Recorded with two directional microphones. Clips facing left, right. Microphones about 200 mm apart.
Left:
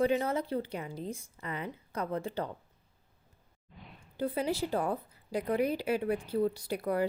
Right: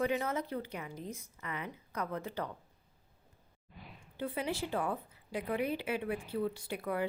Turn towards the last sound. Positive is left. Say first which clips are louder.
# left 5 dB
turn(degrees=40)  # may be behind; listen again after turning